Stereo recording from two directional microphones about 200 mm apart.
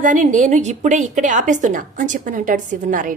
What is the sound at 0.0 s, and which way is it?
A woman's voice, 40° right (ahead or behind).